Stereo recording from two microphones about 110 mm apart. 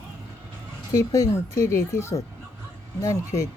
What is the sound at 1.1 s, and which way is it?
Speech, 30° left (ahead or behind).